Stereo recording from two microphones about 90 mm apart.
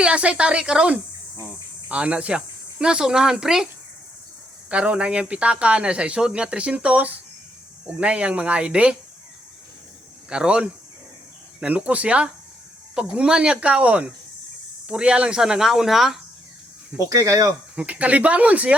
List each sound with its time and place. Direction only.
0.0 s speech: 15° right (ahead or behind)
4.7 s speech: 15° right (ahead or behind)
10.2 s speech: 10° right (ahead or behind)
17.0 s speech: 40° right (ahead or behind)
17.7 s speech: 15° right (ahead or behind)